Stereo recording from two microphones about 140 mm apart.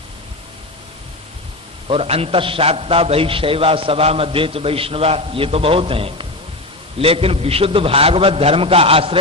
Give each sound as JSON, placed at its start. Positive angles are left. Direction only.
{"t": 1.9, "sound": "a man's voice", "side_deg": -45}